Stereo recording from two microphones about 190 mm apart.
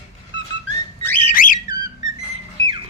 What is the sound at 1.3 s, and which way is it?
Whistle, 45° left (ahead or behind).